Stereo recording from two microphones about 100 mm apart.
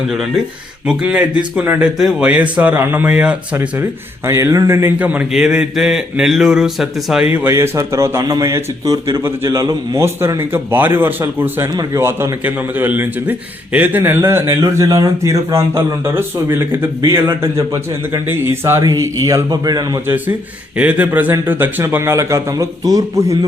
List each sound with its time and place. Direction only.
0.9 s speech: 10° right (ahead or behind)
3.1 s speech: 10° right (ahead or behind)
4.3 s a man's voice: 30° right (ahead or behind); by 7.3 s 5° right (ahead or behind)
7.3 s a man's voice: 25° right (ahead or behind)
18.8 s speech: 35° right (ahead or behind)
20.1 s a man's voice: 20° right (ahead or behind); by 23.5 s 35° right (ahead or behind)